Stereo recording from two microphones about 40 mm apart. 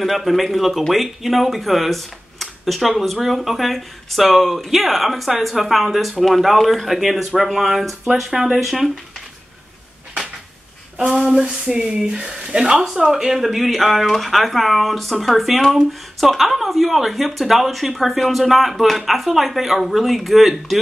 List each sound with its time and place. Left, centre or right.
0.0 s speech: centre
11.2 s speech: right
12.8 s speech: centre